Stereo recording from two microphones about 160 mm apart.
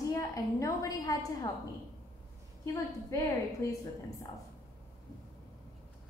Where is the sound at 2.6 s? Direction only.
15° left (ahead or behind).